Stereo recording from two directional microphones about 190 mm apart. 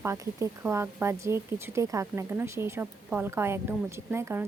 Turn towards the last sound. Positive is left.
turn(degrees=-10)  # may be behind; listen again after turning